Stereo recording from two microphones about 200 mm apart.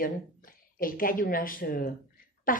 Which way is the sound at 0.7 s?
45° left (ahead or behind).